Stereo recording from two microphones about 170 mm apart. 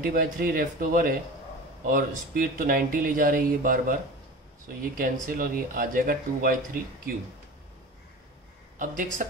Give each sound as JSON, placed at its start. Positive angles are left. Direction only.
{"t": 0.0, "sound": "speech", "side_deg": -55}
{"t": 8.7, "sound": "speech", "side_deg": -50}